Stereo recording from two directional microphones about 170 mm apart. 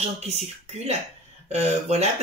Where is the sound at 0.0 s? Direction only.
40° right (ahead or behind).